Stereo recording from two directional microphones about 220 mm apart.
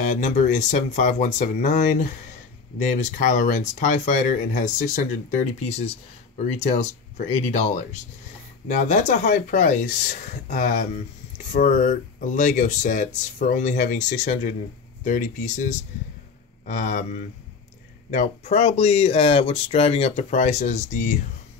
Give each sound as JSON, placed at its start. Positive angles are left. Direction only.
{"t": 0.0, "sound": "speech", "side_deg": 35}
{"t": 18.1, "sound": "speech", "side_deg": 30}